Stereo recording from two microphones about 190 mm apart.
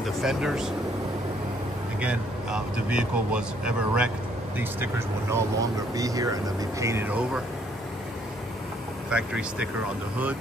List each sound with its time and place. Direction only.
0.0 s speech: centre (ahead or behind)
2.0 s speech: 5° right (ahead or behind)
9.1 s speech: 5° right (ahead or behind)